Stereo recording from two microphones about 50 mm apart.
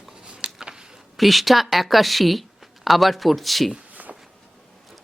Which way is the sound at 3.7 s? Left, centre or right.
Right.